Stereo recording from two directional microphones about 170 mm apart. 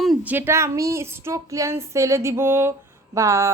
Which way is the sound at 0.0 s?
Centre (ahead or behind).